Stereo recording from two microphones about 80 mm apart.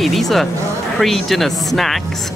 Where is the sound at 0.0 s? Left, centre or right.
Centre.